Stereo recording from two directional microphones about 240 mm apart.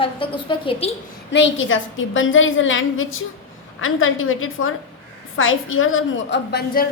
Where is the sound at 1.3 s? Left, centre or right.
Left.